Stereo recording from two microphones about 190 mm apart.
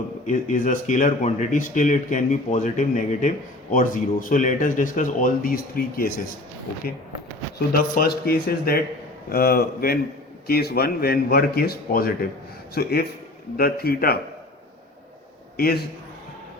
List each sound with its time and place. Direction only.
0.3 s speech: 45° left (ahead or behind)
7.7 s speech: 50° left (ahead or behind)
15.5 s a man's voice: 55° left (ahead or behind)